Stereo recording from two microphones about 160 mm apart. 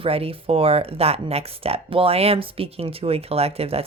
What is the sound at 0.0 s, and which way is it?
Speech, 35° right (ahead or behind).